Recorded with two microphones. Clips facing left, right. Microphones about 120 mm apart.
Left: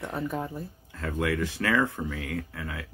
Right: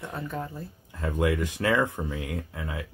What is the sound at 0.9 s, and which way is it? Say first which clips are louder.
Speech: right 3 dB; 15° right (ahead or behind).